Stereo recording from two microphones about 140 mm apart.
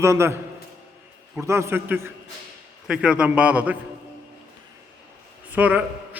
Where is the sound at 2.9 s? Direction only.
5° right (ahead or behind).